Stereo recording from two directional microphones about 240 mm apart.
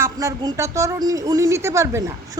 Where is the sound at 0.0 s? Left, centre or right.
Centre.